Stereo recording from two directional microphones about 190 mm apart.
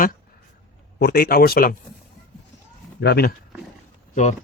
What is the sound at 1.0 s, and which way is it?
Speech, 55° left (ahead or behind).